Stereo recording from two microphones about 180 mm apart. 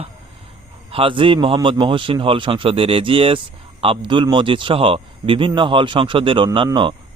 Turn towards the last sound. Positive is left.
turn(degrees=-25)  # may be behind; listen again after turning